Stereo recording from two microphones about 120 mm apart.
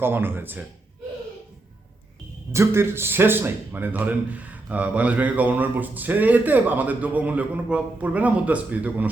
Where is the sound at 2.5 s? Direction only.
20° right (ahead or behind).